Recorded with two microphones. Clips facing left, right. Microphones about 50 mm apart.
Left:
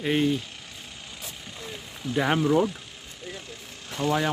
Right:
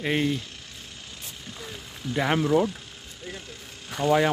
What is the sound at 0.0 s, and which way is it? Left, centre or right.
Speech, centre.